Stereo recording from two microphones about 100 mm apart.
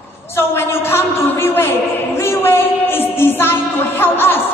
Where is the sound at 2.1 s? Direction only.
25° left (ahead or behind).